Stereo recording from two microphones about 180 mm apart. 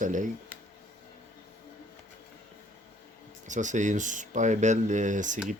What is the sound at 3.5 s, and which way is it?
Speech, 45° right (ahead or behind).